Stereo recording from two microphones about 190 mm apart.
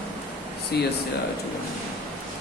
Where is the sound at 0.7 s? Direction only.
60° left (ahead or behind).